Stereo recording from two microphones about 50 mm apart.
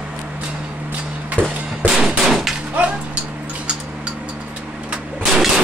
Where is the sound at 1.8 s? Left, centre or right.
Centre.